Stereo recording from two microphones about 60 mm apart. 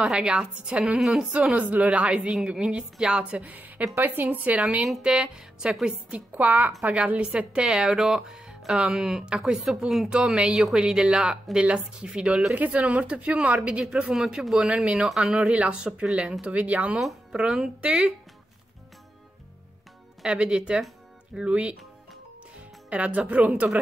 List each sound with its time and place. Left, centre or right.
0.0 s a woman's voice: centre
0.9 s speech: centre
1.5 s a woman's voice: centre
6.0 s speech: right
6.8 s a woman's voice: centre
7.6 s a woman's voice: centre
12.5 s speech: right; by 15.5 s centre
15.5 s a woman's voice: centre
16.5 s speech: right
17.0 s a woman's voice: centre
20.2 s a woman's voice: centre
22.8 s speech: centre